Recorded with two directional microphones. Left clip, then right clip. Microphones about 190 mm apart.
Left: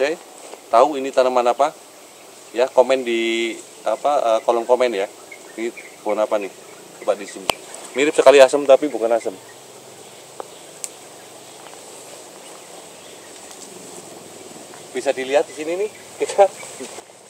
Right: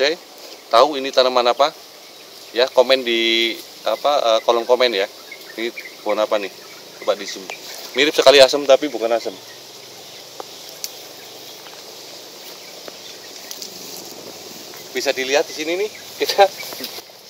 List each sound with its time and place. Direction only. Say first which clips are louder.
0.7 s speech: right 1 dB; 5° left (ahead or behind)
7.1 s speech: left 1 dB; 15° left (ahead or behind)
15.0 s speech: even; 20° left (ahead or behind); by 16.4 s 5° left (ahead or behind)